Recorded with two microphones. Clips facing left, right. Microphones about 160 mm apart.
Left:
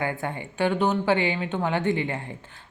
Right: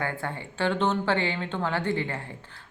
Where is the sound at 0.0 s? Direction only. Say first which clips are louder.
Left 3 dB; 15° left (ahead or behind).